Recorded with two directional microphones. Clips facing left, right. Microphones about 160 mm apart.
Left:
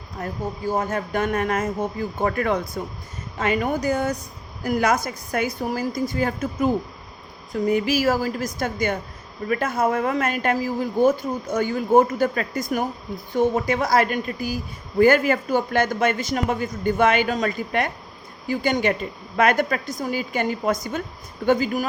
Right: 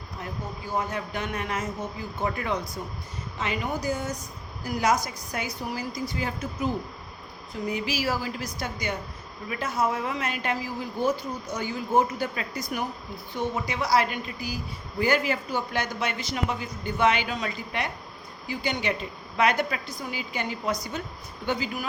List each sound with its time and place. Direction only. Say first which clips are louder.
0.2 s a woman's voice: left 9 dB; 45° left (ahead or behind)